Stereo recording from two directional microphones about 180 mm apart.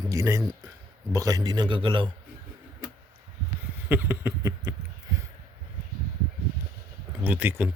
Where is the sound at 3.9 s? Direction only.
10° right (ahead or behind).